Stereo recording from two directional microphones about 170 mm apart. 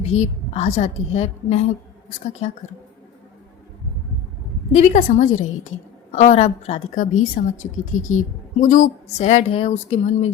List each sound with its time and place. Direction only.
0.0 s a woman's voice: 40° left (ahead or behind)
4.7 s a woman's voice: 45° left (ahead or behind)